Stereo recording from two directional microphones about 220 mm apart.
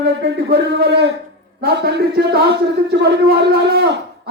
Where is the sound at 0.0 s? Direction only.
50° right (ahead or behind).